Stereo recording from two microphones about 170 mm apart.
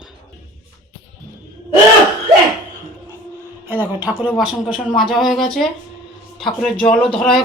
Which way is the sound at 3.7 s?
10° right (ahead or behind).